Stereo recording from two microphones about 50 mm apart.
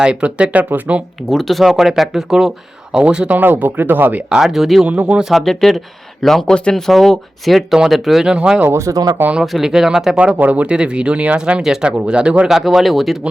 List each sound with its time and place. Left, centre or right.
0.0 s speech: right
1.3 s speech: centre
1.6 s speech: centre
2.9 s speech: centre
3.2 s speech: right
4.3 s speech: centre
4.9 s speech: right
5.5 s speech: centre
6.5 s speech: centre
6.8 s speech: centre
8.2 s speech: centre
9.4 s speech: centre
10.2 s speech: right
12.5 s speech: centre